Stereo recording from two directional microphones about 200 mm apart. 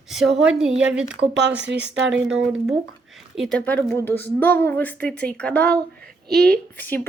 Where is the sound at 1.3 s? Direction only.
60° right (ahead or behind).